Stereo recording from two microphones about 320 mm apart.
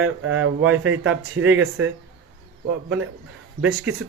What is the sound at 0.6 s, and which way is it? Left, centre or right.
Speech, centre.